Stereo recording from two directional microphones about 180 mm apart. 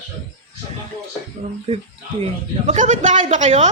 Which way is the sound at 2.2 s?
40° right (ahead or behind).